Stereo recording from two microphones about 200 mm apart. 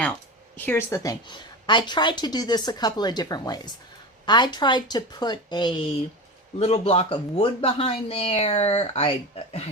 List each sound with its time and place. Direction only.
0.5 s speech: 10° left (ahead or behind); by 9.6 s 30° left (ahead or behind)